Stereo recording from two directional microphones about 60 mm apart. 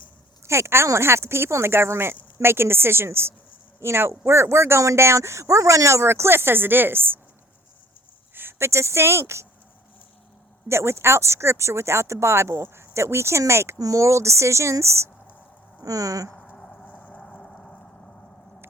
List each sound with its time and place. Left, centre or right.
0.4 s speech: right
8.4 s speech: right
10.7 s speech: right
13.7 s speech: right
15.8 s speech: right
16.6 s vehicle: centre
16.8 s vehicle: left
17.4 s a sound: centre